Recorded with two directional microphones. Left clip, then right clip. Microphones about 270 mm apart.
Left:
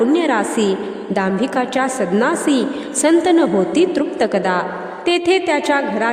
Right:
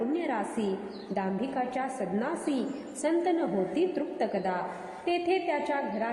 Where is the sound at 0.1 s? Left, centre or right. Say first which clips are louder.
Left 15 dB; left.